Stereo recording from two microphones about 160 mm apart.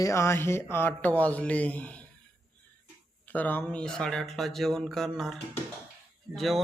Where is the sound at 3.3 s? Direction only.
10° left (ahead or behind).